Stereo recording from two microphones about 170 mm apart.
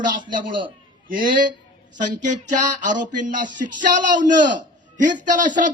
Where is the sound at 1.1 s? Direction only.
55° right (ahead or behind).